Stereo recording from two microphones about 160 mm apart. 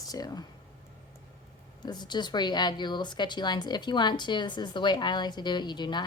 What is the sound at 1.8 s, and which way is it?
A woman's voice, 25° left (ahead or behind).